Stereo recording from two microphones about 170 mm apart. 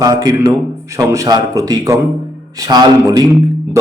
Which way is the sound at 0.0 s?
20° right (ahead or behind).